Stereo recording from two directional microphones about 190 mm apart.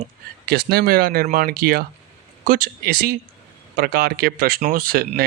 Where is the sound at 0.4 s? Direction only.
55° right (ahead or behind).